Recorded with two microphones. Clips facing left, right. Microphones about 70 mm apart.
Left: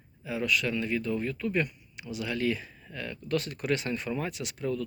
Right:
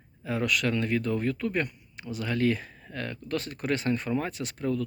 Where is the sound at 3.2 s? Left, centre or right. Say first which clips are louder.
Left 2 dB; right.